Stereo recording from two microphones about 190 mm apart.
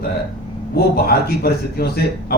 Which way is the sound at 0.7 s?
55° left (ahead or behind).